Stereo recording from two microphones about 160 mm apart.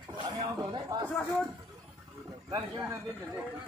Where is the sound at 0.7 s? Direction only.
25° right (ahead or behind).